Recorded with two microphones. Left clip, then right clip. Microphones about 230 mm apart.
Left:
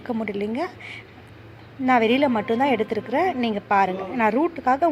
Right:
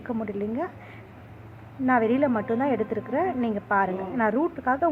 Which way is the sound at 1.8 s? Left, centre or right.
Left.